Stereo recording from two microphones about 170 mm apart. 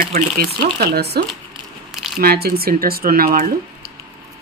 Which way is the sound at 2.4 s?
65° right (ahead or behind).